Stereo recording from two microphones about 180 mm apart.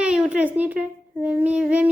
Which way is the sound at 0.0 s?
5° right (ahead or behind).